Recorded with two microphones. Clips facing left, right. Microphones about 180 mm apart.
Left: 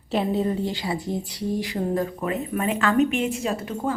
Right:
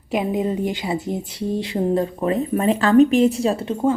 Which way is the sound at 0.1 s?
15° right (ahead or behind).